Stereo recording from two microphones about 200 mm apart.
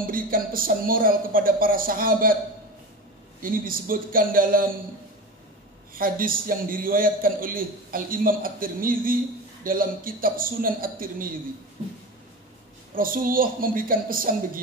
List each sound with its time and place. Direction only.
0.0 s a man's voice: 45° right (ahead or behind)
3.3 s a man's voice: 45° right (ahead or behind)
5.9 s a man's voice: 45° right (ahead or behind)
12.9 s a man's voice: 45° right (ahead or behind)